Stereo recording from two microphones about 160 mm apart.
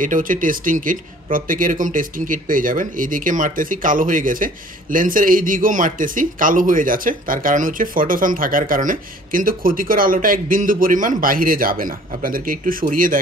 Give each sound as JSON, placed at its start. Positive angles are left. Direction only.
{"t": 0.0, "sound": "speech", "side_deg": -55}